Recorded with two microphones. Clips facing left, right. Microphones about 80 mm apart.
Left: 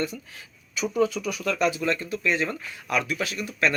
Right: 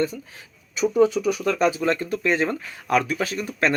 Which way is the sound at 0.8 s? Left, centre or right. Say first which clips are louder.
Right 6 dB; right.